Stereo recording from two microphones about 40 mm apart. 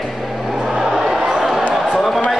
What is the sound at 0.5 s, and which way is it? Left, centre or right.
Music, centre.